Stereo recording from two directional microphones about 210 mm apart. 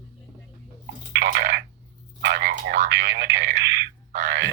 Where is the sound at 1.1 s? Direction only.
50° right (ahead or behind).